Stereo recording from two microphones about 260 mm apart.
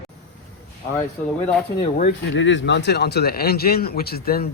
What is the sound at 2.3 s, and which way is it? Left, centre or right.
Speech, left.